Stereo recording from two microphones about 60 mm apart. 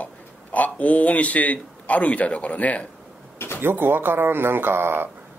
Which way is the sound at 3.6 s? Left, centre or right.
Right.